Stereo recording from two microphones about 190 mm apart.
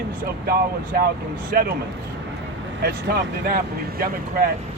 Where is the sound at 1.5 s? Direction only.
50° right (ahead or behind).